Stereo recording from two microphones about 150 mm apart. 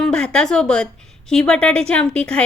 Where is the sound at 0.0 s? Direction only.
5° left (ahead or behind).